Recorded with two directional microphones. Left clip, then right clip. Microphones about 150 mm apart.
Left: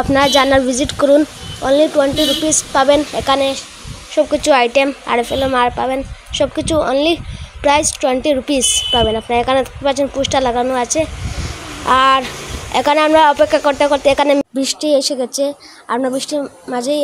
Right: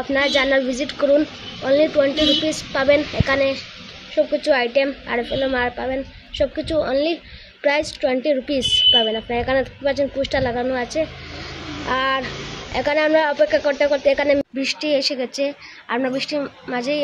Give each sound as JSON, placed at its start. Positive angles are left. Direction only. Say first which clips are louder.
{"t": 0.1, "sound": "a woman's voice", "louder": "left 6 dB", "side_deg": 45}
{"t": 14.6, "sound": "speech", "louder": "left 5 dB", "side_deg": 50}
{"t": 16.3, "sound": "a woman's voice", "louder": "left 4 dB", "side_deg": 35}
{"t": 16.7, "sound": "speech", "louder": "left 5 dB", "side_deg": 45}